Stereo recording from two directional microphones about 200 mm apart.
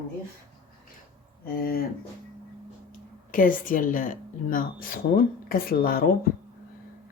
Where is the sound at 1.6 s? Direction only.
50° left (ahead or behind).